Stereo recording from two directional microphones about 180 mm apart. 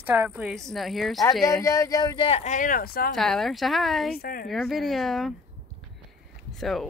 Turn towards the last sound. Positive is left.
turn(degrees=0)  # may be behind; listen again after turning